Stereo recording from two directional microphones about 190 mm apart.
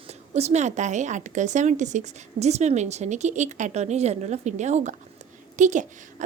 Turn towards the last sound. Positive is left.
turn(degrees=-40)  # may be behind; listen again after turning